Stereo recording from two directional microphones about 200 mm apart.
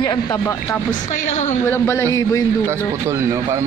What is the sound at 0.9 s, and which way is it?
Speech, 35° left (ahead or behind).